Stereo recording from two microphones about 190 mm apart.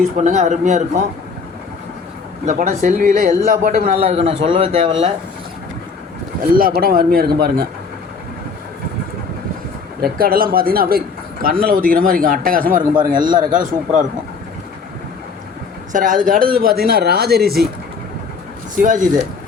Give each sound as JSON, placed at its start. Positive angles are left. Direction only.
{"t": 0.2, "sound": "speech", "side_deg": -35}
{"t": 2.5, "sound": "speech", "side_deg": -40}
{"t": 3.9, "sound": "speech", "side_deg": -35}
{"t": 6.4, "sound": "speech", "side_deg": -50}
{"t": 10.0, "sound": "speech", "side_deg": -50}
{"t": 15.9, "sound": "speech", "side_deg": -45}
{"t": 18.8, "sound": "speech", "side_deg": -40}